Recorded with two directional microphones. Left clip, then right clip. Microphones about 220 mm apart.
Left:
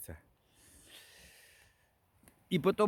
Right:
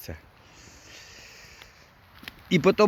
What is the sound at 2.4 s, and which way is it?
Speech, 10° left (ahead or behind).